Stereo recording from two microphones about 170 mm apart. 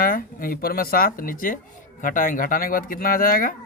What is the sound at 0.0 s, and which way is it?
Speech, 55° left (ahead or behind).